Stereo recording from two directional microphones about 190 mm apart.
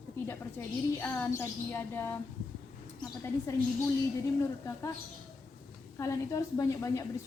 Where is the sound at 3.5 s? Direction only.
15° left (ahead or behind).